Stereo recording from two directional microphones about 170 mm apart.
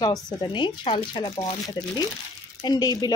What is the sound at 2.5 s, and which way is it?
Speech, 25° left (ahead or behind).